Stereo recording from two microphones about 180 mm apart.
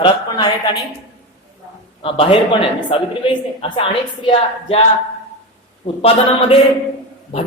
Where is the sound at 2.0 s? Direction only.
30° left (ahead or behind).